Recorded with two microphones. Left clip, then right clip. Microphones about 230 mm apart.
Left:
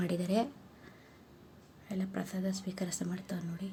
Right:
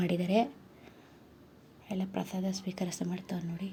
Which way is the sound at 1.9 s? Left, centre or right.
Centre.